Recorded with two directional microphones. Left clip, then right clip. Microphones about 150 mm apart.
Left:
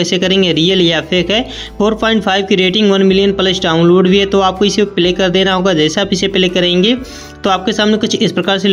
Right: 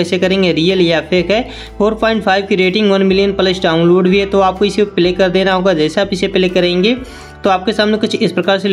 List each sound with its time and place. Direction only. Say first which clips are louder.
0.0 s speech: left 1 dB; 30° left (ahead or behind)